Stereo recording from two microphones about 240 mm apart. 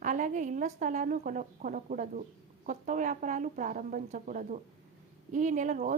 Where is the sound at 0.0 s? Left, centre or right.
Right.